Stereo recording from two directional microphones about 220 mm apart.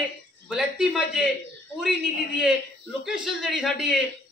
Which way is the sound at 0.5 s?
Centre (ahead or behind).